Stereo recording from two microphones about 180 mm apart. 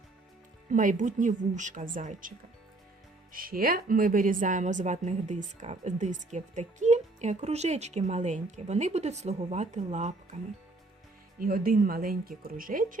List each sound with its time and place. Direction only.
0.7 s speech: 45° right (ahead or behind)
3.3 s a woman's voice: 55° right (ahead or behind)
11.3 s speech: 50° right (ahead or behind)